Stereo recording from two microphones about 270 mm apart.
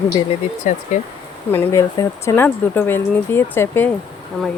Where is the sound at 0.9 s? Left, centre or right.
Left.